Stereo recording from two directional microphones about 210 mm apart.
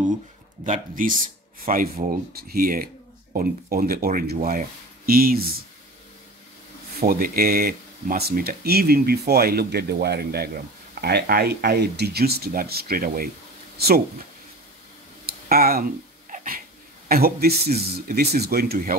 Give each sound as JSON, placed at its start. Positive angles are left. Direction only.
{"t": 0.7, "sound": "speech", "side_deg": -40}
{"t": 7.0, "sound": "speech", "side_deg": -45}
{"t": 15.2, "sound": "a sound", "side_deg": -45}
{"t": 17.1, "sound": "speech", "side_deg": -45}